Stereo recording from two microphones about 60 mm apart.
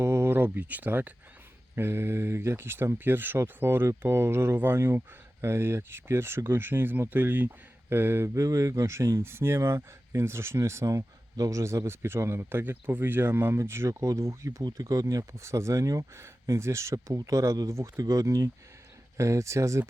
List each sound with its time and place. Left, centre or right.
0.0 s speech: right
1.7 s speech: right
8.4 s speech: right
9.2 s speech: right
10.8 s speech: right
11.9 s speech: right
19.1 s speech: right